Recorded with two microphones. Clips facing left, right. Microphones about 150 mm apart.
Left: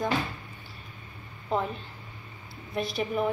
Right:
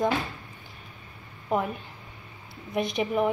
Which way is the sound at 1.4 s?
10° right (ahead or behind).